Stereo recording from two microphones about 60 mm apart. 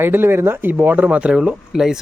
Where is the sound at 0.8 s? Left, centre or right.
Right.